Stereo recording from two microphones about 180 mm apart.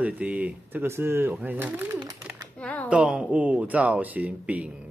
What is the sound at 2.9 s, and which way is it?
Speech, 5° right (ahead or behind).